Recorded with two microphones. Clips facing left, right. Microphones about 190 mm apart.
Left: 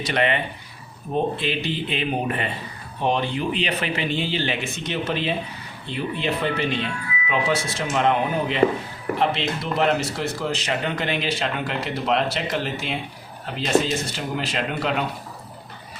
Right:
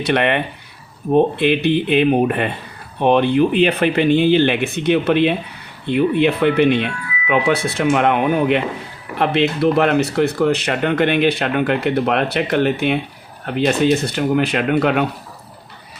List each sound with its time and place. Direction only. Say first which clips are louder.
0.0 s speech: right 5 dB; 60° right (ahead or behind)